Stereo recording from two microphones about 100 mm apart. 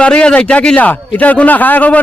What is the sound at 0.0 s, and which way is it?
A man's voice, 10° left (ahead or behind).